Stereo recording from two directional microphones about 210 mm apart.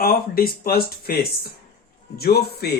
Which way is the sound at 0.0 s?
45° left (ahead or behind).